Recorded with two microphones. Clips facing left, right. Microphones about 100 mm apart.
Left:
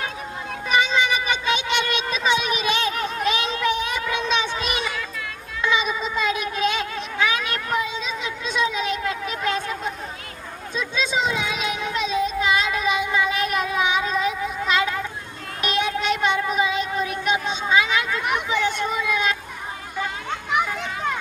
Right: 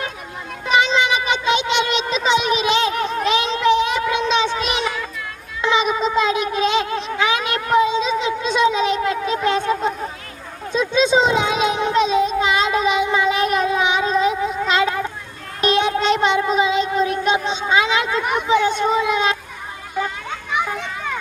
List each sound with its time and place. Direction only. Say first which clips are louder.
0.9 s a sound: right 3 dB; 20° right (ahead or behind)
5.6 s cat: right 5 dB; 25° right (ahead or behind)
10.7 s a sound: right 9 dB; 25° right (ahead or behind)
15.6 s child singing: right 6 dB; 30° right (ahead or behind)
17.7 s speech: right 3 dB; 25° right (ahead or behind)
20.7 s children playing: even; centre (ahead or behind)